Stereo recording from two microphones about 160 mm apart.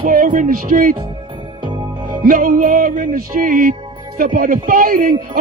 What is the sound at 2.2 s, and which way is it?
Music, 55° right (ahead or behind).